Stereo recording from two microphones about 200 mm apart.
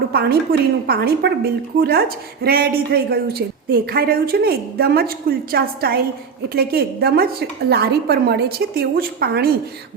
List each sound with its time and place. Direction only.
0.1 s a woman's voice: 50° right (ahead or behind)